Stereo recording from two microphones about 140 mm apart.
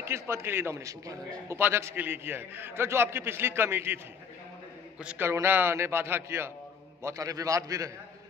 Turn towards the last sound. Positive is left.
turn(degrees=-25)  # may be behind; listen again after turning